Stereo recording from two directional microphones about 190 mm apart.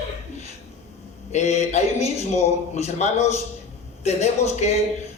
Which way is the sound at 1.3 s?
35° left (ahead or behind).